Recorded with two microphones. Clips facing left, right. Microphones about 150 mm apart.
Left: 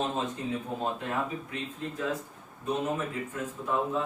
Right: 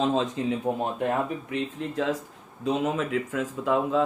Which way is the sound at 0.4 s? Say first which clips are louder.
Right 7 dB; 90° right.